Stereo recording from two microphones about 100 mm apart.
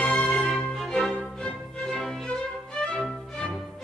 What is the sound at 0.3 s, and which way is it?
Music, centre (ahead or behind).